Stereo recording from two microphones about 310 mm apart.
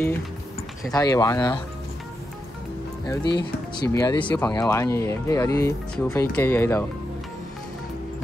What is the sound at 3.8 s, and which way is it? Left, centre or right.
Speech, centre.